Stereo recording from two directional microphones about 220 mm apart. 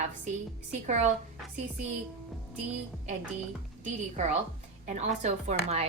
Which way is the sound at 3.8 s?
35° right (ahead or behind).